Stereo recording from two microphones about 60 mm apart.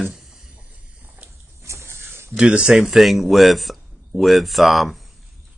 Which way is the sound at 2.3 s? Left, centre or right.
Centre.